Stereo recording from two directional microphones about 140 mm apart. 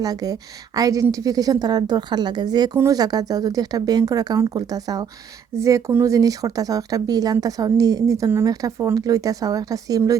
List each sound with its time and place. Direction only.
0.0 s speech: 25° right (ahead or behind)